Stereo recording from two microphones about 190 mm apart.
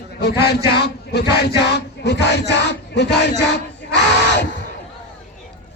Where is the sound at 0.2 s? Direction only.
60° left (ahead or behind).